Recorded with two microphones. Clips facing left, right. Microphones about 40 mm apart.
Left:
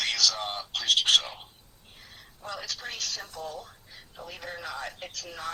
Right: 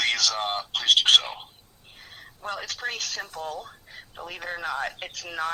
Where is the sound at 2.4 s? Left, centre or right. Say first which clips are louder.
Right 5 dB; right.